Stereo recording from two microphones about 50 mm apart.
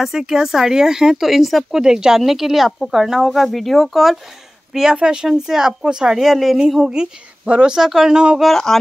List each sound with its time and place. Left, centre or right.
0.0 s speech: centre
4.9 s speech: centre
6.9 s speech: centre
7.7 s speech: centre
8.1 s speech: centre